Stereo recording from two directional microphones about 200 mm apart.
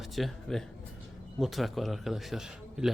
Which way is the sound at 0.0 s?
Centre (ahead or behind).